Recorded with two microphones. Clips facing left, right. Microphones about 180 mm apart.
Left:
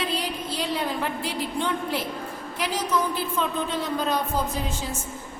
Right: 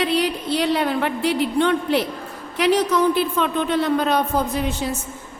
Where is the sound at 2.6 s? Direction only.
70° right (ahead or behind).